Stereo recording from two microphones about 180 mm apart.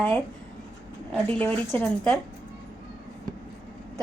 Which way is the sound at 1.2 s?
10° left (ahead or behind).